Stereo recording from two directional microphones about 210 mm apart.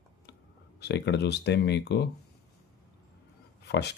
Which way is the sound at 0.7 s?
55° left (ahead or behind).